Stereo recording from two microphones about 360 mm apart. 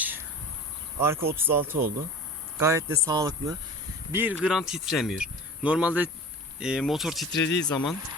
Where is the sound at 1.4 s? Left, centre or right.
Centre.